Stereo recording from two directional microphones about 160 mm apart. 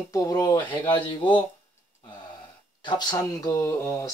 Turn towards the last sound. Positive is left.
turn(degrees=15)  # may be behind; listen again after turning